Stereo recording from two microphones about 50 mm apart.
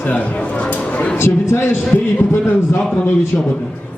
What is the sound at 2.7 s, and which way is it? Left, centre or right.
Speech, centre.